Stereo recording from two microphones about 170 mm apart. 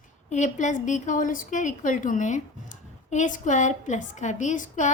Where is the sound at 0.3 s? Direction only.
45° left (ahead or behind).